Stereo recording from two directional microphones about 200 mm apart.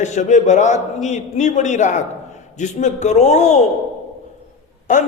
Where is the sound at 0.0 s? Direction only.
35° left (ahead or behind).